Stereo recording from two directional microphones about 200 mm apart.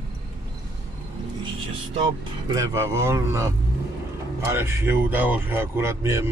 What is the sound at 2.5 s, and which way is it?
Speech, 15° right (ahead or behind).